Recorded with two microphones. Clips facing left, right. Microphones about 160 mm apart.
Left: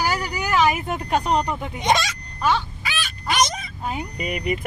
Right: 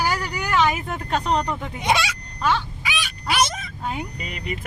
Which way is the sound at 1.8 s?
10° right (ahead or behind).